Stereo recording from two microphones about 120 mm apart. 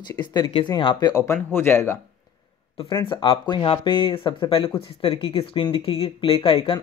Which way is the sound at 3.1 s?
45° left (ahead or behind).